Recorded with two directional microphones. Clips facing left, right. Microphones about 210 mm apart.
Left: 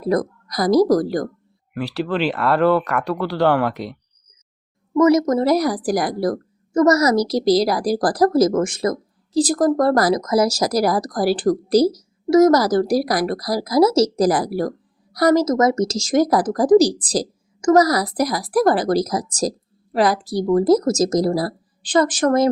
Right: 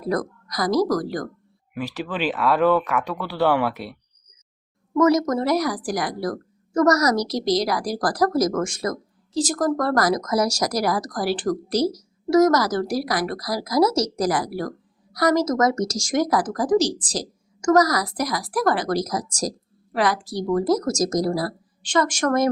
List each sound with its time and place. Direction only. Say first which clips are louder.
0.1 s a woman's voice: left 5 dB; 30° left (ahead or behind)
1.7 s speech: left 5 dB; 10° right (ahead or behind)
4.9 s speech: left 4 dB; 25° left (ahead or behind)
6.7 s speech: left 3 dB; 25° left (ahead or behind)